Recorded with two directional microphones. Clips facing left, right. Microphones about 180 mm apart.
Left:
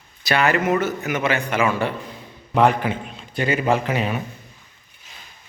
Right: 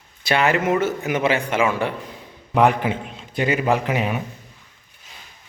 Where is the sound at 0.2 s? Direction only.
25° right (ahead or behind).